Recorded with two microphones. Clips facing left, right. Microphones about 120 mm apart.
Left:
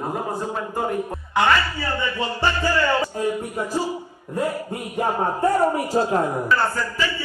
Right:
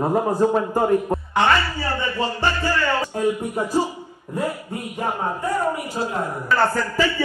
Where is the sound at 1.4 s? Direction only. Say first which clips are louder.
Even; 25° right (ahead or behind).